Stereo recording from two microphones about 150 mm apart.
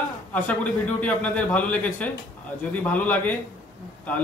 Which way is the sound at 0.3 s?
10° left (ahead or behind).